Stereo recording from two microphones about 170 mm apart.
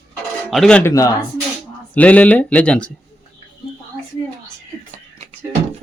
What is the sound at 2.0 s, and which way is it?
Speech, 10° left (ahead or behind).